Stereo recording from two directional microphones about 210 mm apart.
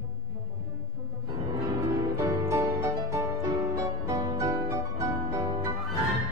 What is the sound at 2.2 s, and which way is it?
Music, 15° right (ahead or behind).